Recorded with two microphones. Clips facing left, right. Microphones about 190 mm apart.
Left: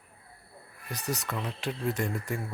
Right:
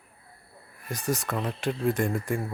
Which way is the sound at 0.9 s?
50° right (ahead or behind).